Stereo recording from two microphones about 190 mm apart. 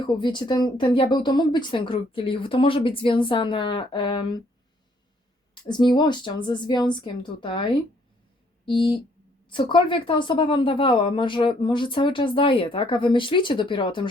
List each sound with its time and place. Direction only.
0.0 s speech: 25° left (ahead or behind)
5.6 s speech: 25° left (ahead or behind)